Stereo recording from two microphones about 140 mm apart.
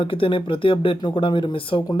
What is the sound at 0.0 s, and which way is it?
Speech, 40° left (ahead or behind).